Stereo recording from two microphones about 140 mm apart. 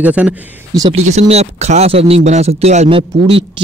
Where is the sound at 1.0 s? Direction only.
55° right (ahead or behind).